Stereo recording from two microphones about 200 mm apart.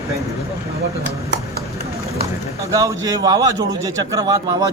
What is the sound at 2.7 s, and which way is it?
A man's voice, 15° right (ahead or behind).